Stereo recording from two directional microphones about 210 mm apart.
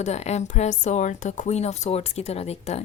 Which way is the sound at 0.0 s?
30° left (ahead or behind).